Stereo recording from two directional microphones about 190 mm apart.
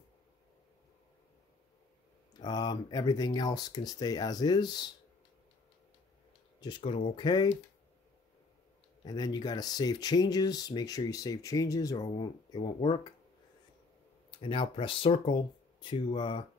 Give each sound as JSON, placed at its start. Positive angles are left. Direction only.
{"t": 2.3, "sound": "speech", "side_deg": 20}
{"t": 6.6, "sound": "speech", "side_deg": 25}
{"t": 9.0, "sound": "speech", "side_deg": 20}
{"t": 14.4, "sound": "speech", "side_deg": 25}